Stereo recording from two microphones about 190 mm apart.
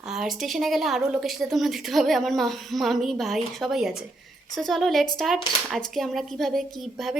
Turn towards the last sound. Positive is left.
turn(degrees=0)  # may be behind; listen again after turning